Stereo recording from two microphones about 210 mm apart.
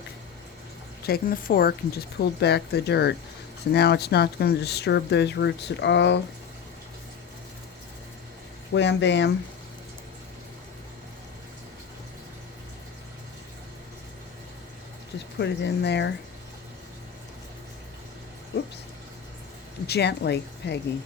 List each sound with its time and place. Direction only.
1.0 s speech: 45° left (ahead or behind)
8.7 s speech: 60° left (ahead or behind)
15.4 s speech: 55° left (ahead or behind)
19.9 s speech: 55° left (ahead or behind)